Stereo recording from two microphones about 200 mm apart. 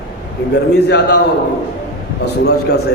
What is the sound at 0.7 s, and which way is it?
Speech, 55° left (ahead or behind).